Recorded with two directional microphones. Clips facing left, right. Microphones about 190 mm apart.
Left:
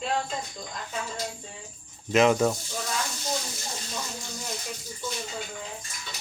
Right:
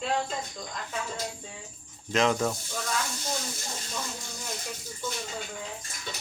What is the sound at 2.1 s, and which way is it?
Speech, 5° left (ahead or behind).